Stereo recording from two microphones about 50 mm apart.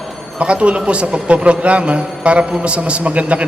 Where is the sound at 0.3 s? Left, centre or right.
Right.